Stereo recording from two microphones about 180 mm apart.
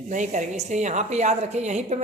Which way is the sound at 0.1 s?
45° right (ahead or behind).